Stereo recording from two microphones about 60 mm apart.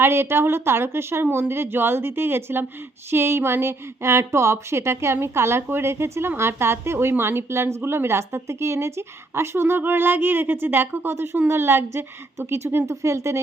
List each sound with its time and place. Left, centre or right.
0.0 s speech: right